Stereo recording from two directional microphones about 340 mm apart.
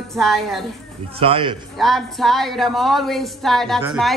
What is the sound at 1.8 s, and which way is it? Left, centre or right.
A woman's voice, centre.